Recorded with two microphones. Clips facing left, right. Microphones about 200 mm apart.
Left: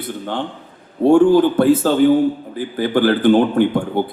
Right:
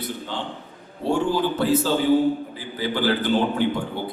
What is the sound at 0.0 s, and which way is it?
A man's voice, 55° left (ahead or behind).